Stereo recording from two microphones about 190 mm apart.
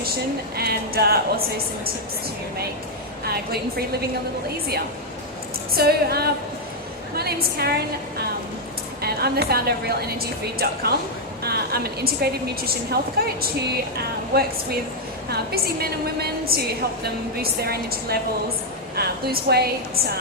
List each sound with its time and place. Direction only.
0.5 s a woman's voice: 55° right (ahead or behind)
3.2 s a woman's voice: 55° right (ahead or behind)
5.7 s a woman's voice: 55° right (ahead or behind)
9.0 s a woman's voice: 55° right (ahead or behind)